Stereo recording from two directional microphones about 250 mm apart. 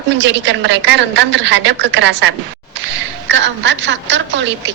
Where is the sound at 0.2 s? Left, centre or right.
Right.